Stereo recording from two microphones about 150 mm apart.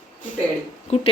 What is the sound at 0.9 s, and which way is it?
Speech, 45° left (ahead or behind).